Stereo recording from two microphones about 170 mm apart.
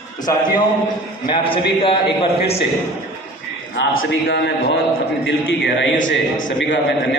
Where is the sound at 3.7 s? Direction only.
75° left (ahead or behind).